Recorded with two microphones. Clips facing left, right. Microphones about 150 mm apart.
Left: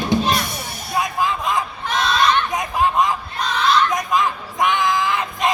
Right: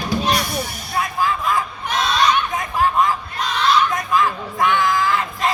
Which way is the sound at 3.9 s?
20° left (ahead or behind).